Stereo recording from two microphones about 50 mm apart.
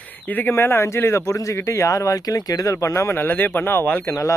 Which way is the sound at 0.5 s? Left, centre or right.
Left.